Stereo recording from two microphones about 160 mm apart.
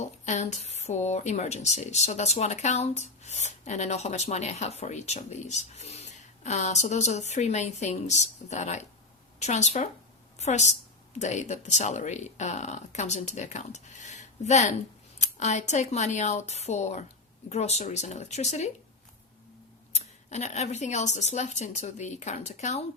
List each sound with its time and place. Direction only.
0.0 s a woman's voice: 45° left (ahead or behind)
19.9 s speech: 45° left (ahead or behind)